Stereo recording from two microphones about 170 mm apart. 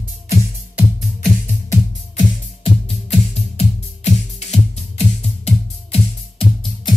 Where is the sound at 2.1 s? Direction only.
40° left (ahead or behind).